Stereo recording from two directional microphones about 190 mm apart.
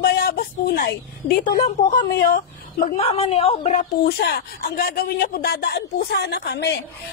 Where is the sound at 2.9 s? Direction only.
30° left (ahead or behind).